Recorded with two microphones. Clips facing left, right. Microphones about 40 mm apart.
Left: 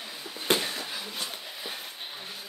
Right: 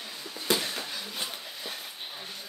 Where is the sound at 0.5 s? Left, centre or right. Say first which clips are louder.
Left 2 dB; left.